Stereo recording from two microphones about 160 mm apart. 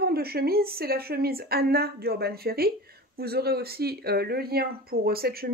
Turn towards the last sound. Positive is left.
turn(degrees=-70)  # may be behind; listen again after turning